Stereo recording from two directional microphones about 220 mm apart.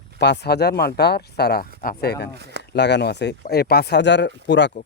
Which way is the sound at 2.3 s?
50° right (ahead or behind).